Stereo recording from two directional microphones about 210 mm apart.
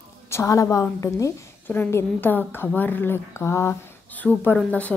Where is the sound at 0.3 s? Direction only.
15° left (ahead or behind).